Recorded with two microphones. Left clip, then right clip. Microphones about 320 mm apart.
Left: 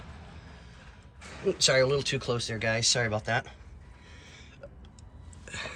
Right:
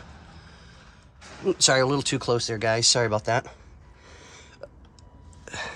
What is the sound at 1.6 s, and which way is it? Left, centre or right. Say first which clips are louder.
Speech: right 3 dB; centre.